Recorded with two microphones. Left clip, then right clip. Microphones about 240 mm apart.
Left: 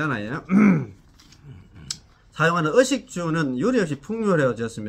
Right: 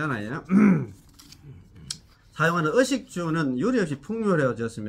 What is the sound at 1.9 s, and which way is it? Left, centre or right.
Speech, centre.